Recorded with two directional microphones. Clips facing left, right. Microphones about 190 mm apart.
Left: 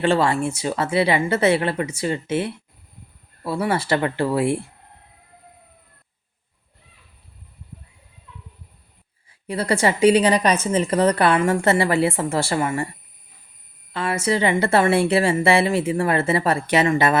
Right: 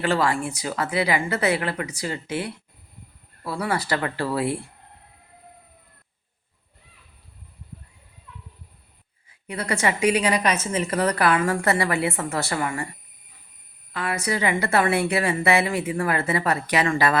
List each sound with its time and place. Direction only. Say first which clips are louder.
0.0 s a woman's voice: left 4 dB; 25° left (ahead or behind)
9.5 s a woman's voice: left 4 dB; 30° left (ahead or behind)
13.9 s a woman's voice: left 4 dB; 25° left (ahead or behind)